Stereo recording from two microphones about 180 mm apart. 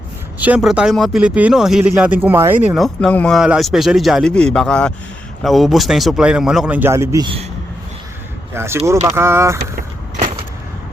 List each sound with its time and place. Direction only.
0.3 s speech: 10° right (ahead or behind)
2.7 s speech: centre (ahead or behind); by 7.3 s 15° right (ahead or behind)
8.5 s speech: 15° right (ahead or behind)
9.7 s vehicle: 50° right (ahead or behind)